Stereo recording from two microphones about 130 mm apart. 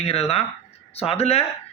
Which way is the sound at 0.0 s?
50° left (ahead or behind).